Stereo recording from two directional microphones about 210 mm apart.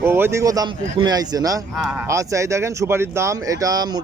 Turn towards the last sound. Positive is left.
turn(degrees=-15)  # may be behind; listen again after turning